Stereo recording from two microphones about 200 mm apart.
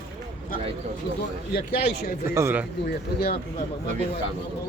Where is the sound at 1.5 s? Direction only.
50° left (ahead or behind).